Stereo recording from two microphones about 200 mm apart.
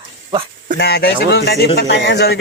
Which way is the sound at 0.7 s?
55° left (ahead or behind).